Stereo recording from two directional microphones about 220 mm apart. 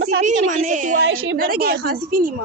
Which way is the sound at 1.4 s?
40° right (ahead or behind).